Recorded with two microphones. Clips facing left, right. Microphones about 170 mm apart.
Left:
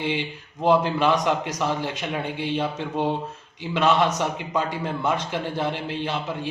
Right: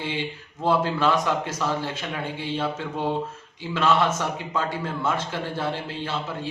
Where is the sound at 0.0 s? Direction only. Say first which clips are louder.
Left 3 dB; 15° left (ahead or behind).